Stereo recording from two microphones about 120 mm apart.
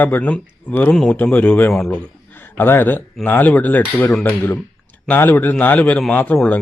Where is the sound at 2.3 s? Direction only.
15° left (ahead or behind).